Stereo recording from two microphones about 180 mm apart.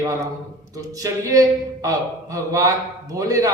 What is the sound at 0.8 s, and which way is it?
Speech, 20° right (ahead or behind).